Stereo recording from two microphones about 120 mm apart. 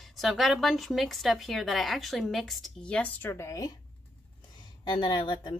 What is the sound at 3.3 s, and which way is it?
Speech, 25° left (ahead or behind).